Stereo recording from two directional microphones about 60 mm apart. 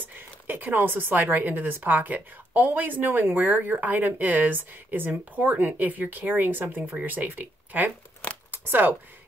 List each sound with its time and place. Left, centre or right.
0.0 s speech: right
8.5 s scissors: right